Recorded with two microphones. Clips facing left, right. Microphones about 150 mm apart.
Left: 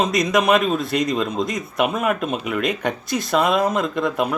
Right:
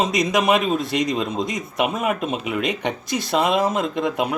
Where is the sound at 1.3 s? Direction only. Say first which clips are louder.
Left 1 dB; centre (ahead or behind).